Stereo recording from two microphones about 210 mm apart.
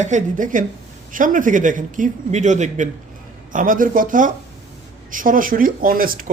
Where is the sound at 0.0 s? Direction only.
35° right (ahead or behind).